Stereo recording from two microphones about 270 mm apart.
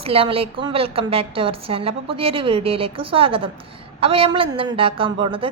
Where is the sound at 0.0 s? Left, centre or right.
Right.